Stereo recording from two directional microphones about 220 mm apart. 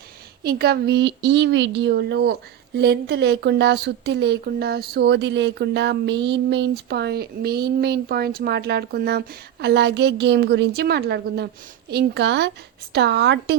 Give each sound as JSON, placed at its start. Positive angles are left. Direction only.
{"t": 0.4, "sound": "speech", "side_deg": -45}